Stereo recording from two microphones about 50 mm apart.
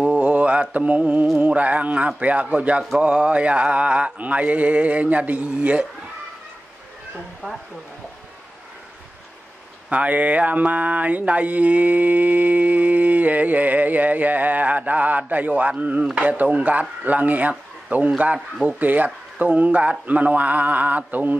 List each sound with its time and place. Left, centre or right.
0.0 s mantra: right
9.8 s mantra: right
18.8 s mantra: right